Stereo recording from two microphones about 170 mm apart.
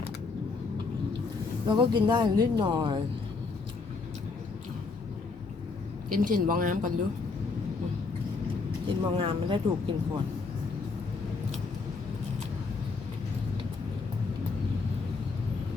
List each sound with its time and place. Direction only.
1.6 s speech: 25° right (ahead or behind)
6.1 s speech: 55° right (ahead or behind)
8.9 s speech: 30° right (ahead or behind)